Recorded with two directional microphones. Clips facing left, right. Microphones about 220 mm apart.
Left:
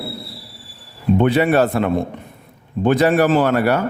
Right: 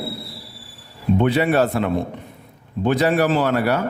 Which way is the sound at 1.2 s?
55° left (ahead or behind).